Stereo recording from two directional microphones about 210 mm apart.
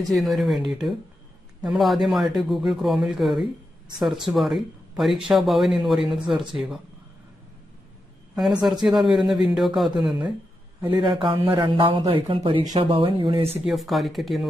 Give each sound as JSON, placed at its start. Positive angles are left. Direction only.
{"t": 0.0, "sound": "speech", "side_deg": 0}
{"t": 8.4, "sound": "speech", "side_deg": 0}
{"t": 10.8, "sound": "speech", "side_deg": -15}
{"t": 13.7, "sound": "speech", "side_deg": 0}